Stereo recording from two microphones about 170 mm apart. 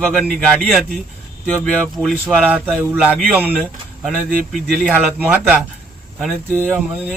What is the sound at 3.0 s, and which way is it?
A man's voice, 10° right (ahead or behind).